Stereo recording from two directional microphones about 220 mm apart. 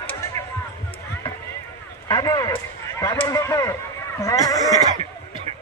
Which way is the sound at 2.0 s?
15° left (ahead or behind).